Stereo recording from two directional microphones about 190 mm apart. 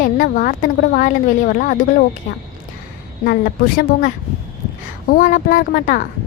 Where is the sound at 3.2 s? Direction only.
50° left (ahead or behind).